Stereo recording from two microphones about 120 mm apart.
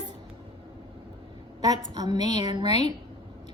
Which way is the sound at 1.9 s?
35° right (ahead or behind).